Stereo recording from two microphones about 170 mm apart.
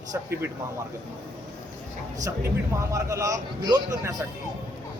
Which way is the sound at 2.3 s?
20° right (ahead or behind).